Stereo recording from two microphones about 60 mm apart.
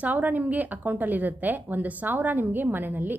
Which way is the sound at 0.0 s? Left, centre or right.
Right.